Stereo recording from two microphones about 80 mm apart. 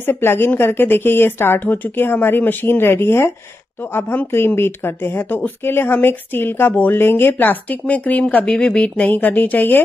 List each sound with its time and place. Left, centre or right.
0.0 s speech: left